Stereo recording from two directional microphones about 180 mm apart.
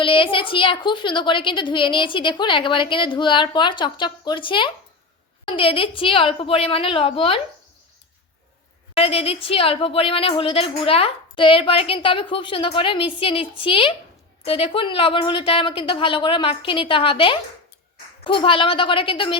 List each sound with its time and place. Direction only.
0.0 s a woman's voice: 30° left (ahead or behind)
9.0 s a woman's voice: 35° left (ahead or behind)